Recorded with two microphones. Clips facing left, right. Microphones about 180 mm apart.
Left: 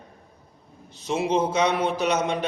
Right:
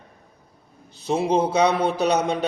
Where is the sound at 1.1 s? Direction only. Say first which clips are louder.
Right 3 dB; 35° right (ahead or behind).